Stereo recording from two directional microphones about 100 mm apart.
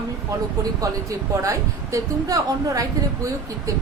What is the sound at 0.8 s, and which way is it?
Speech, 35° right (ahead or behind).